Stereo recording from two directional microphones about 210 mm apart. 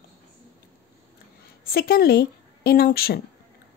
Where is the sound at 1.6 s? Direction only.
45° left (ahead or behind).